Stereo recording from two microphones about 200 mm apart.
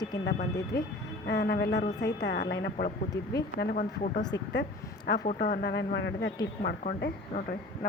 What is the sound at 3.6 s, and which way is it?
Speech, 45° left (ahead or behind).